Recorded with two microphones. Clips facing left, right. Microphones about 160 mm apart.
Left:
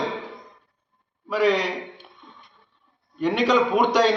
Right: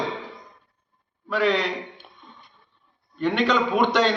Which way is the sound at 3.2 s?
10° left (ahead or behind).